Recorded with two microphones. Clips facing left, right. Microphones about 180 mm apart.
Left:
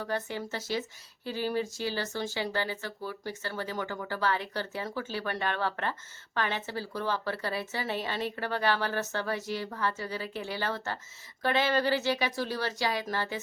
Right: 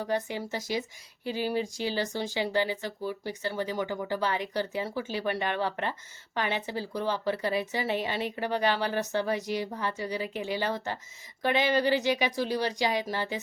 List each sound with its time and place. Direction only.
0.0 s speech: 15° right (ahead or behind)